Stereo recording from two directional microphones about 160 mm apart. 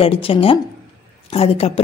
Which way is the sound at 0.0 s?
35° left (ahead or behind).